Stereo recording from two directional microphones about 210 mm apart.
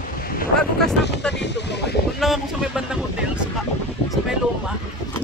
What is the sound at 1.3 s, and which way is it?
Speech, 55° left (ahead or behind).